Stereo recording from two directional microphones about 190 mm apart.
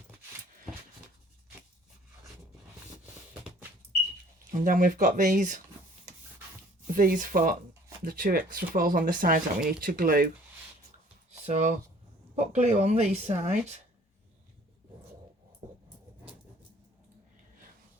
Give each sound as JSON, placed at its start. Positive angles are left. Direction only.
{"t": 4.5, "sound": "speech", "side_deg": -45}
{"t": 6.8, "sound": "speech", "side_deg": -45}
{"t": 11.4, "sound": "speech", "side_deg": -35}